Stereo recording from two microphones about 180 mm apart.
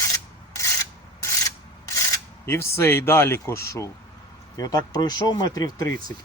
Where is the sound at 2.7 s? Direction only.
15° left (ahead or behind).